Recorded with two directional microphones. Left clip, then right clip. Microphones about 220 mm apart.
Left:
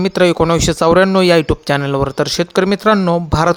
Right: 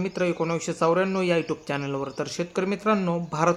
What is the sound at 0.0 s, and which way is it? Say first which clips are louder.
Speech: left 13 dB; 45° left (ahead or behind).